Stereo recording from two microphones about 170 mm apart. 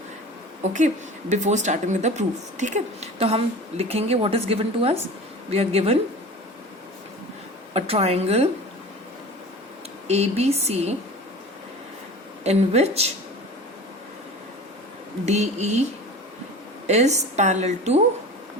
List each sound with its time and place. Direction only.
0.6 s a woman's voice: 45° right (ahead or behind)
7.7 s speech: 35° right (ahead or behind)
10.1 s speech: 40° right (ahead or behind)
12.5 s speech: 40° right (ahead or behind)
15.3 s speech: 40° right (ahead or behind)
16.8 s speech: 40° right (ahead or behind)